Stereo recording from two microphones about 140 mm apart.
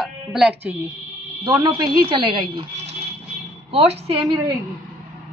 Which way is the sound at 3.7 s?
45° right (ahead or behind).